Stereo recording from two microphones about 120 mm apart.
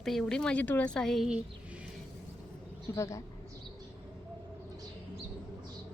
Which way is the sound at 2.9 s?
25° left (ahead or behind).